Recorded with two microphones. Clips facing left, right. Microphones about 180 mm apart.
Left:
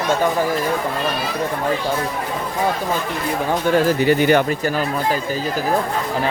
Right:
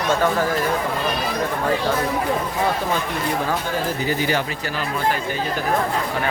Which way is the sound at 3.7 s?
65° left (ahead or behind).